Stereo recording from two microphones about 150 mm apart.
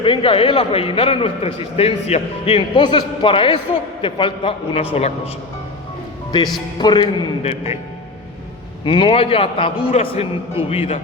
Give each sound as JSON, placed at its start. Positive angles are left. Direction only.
{"t": 0.0, "sound": "a man's voice", "side_deg": 35}
{"t": 6.7, "sound": "speech", "side_deg": 30}
{"t": 7.4, "sound": "a man's voice", "side_deg": 45}
{"t": 8.8, "sound": "a man's voice", "side_deg": 35}